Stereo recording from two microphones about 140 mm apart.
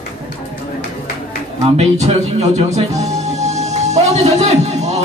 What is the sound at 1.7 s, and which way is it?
A man's voice, 50° right (ahead or behind).